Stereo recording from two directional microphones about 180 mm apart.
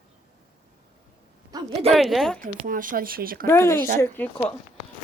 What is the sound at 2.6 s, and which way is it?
Speech, 50° right (ahead or behind).